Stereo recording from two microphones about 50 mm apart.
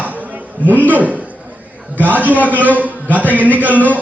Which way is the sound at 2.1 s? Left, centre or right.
Right.